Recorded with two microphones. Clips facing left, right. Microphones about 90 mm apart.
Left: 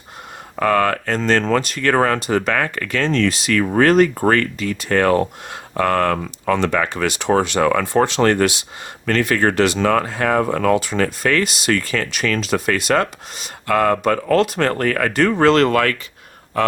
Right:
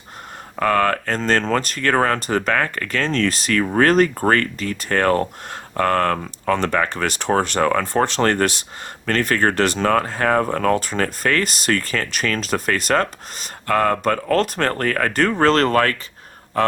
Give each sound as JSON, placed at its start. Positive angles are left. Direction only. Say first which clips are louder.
{"t": 0.7, "sound": "speech", "louder": "left 1 dB", "side_deg": -40}